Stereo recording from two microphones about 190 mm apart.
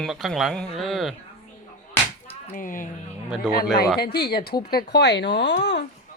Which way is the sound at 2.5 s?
45° left (ahead or behind).